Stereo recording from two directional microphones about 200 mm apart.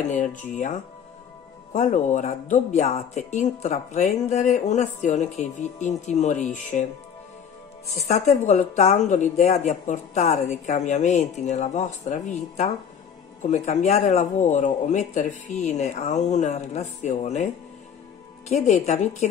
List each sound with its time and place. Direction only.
0.1 s speech: 40° left (ahead or behind)
7.9 s speech: 35° left (ahead or behind)
18.5 s speech: 35° left (ahead or behind)